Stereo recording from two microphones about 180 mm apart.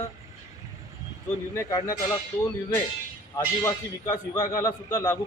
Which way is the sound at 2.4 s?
15° left (ahead or behind).